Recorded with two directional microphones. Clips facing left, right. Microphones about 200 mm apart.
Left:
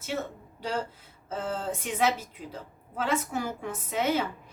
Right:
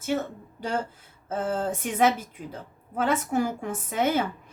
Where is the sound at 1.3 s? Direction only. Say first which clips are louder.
Right 4 dB; 50° right (ahead or behind).